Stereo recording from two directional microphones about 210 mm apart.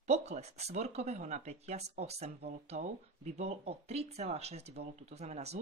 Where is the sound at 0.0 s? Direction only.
30° right (ahead or behind).